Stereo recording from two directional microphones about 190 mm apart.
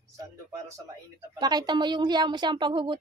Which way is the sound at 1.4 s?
20° right (ahead or behind).